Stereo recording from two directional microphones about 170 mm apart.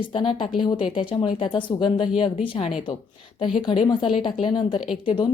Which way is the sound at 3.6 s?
30° left (ahead or behind).